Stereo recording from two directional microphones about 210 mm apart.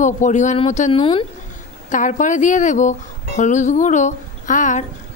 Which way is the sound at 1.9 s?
35° left (ahead or behind).